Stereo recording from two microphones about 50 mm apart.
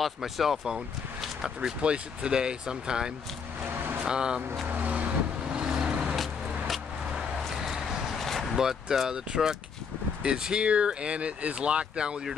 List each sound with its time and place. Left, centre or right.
0.0 s speech: centre
1.2 s a sound: centre
1.8 s speech: centre
3.7 s vehicle: right
4.0 s speech: centre
4.6 s vehicle: right; by 6.1 s centre
7.5 s a sound: centre
8.2 s vehicle: centre
8.5 s speech: centre